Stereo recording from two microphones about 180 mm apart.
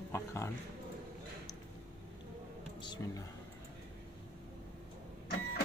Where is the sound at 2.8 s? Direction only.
25° left (ahead or behind).